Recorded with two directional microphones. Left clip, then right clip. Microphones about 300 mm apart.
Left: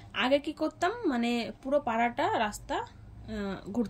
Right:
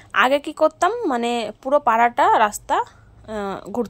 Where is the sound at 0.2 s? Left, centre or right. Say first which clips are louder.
Right 11 dB; centre.